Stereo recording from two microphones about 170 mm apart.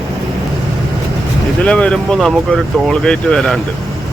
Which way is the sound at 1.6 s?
5° left (ahead or behind).